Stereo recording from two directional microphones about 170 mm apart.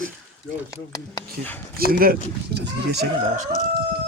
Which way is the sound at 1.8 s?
60° right (ahead or behind).